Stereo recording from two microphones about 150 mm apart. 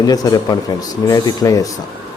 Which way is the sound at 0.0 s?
25° left (ahead or behind).